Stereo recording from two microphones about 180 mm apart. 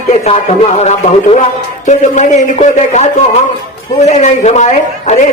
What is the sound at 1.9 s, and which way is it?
A man's voice, 40° left (ahead or behind).